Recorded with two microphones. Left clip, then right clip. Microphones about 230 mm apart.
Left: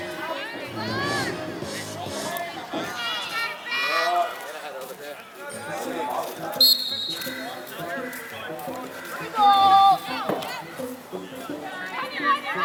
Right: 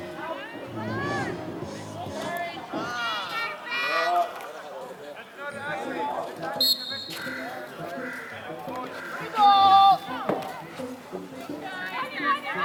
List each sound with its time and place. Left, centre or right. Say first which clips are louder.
0.8 s crowd: left 3 dB; right
1.0 s music: left 3 dB; centre
2.1 s run: even; centre
5.6 s a sound: left 1 dB; centre
6.1 s basketball bounce: left 2 dB; right
6.6 s basketball bounce: left 6 dB; centre
9.3 s run: left 1 dB; centre
11.9 s children playing: left 3 dB; centre